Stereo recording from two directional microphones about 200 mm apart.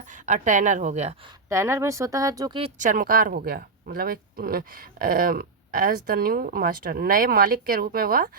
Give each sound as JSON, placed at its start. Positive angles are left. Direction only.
{"t": 0.1, "sound": "a woman's voice", "side_deg": -40}
{"t": 1.5, "sound": "speech", "side_deg": -15}
{"t": 2.6, "sound": "speech", "side_deg": -40}